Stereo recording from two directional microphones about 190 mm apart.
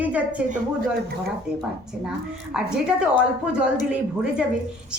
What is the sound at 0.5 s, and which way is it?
Speech, 50° right (ahead or behind).